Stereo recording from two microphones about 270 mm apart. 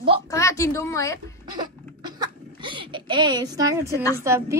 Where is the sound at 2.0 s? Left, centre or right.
Centre.